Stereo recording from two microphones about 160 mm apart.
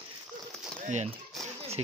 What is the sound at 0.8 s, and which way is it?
Speech, 45° right (ahead or behind).